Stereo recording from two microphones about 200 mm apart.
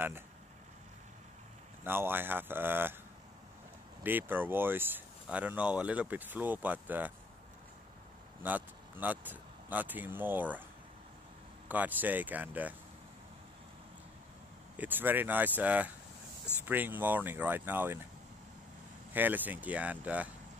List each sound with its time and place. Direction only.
1.9 s speech: 10° right (ahead or behind)
4.0 s speech: 10° right (ahead or behind)
8.4 s speech: 10° right (ahead or behind)
11.7 s speech: 10° right (ahead or behind)
14.8 s speech: 10° right (ahead or behind)
19.1 s speech: 10° right (ahead or behind)